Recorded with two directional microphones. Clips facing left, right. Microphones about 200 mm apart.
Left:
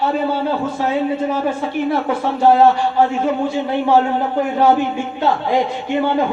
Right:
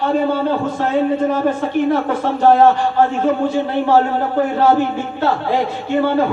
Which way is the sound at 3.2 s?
10° left (ahead or behind).